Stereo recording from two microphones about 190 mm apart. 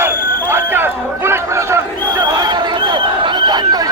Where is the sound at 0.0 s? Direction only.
10° right (ahead or behind).